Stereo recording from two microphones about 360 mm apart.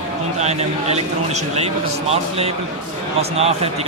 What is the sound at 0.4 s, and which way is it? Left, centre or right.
Speech, centre.